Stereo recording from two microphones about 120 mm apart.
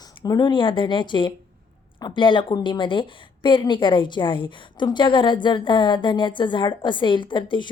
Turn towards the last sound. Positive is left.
turn(degrees=40)  # may be behind; listen again after turning